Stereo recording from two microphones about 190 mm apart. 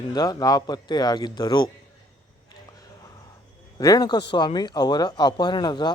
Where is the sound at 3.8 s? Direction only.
20° left (ahead or behind).